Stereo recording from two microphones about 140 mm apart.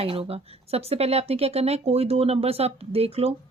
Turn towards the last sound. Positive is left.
turn(degrees=-45)  # may be behind; listen again after turning